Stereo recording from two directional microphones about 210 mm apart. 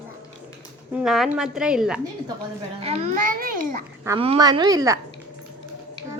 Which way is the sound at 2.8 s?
30° right (ahead or behind).